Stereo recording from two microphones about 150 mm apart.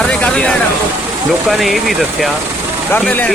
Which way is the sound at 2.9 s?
10° left (ahead or behind).